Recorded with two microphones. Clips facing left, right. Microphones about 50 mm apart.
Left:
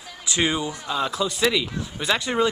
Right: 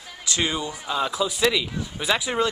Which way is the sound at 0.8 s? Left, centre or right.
Centre.